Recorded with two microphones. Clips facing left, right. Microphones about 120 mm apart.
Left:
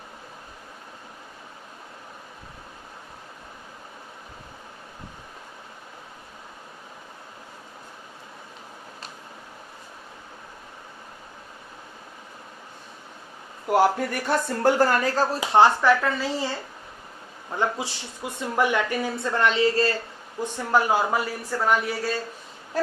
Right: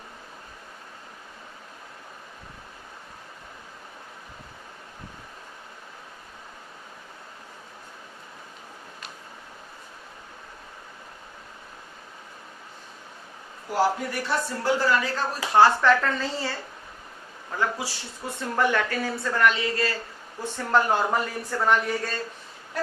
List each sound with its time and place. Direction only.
13.7 s a man's voice: 65° left (ahead or behind)
14.1 s speech: 50° left (ahead or behind)
15.4 s speech: 20° left (ahead or behind)
17.6 s a woman's voice: 20° left (ahead or behind)
20.4 s speech: 10° left (ahead or behind)